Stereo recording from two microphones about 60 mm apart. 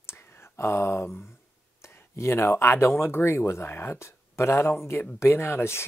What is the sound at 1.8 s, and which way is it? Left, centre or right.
Speech, left.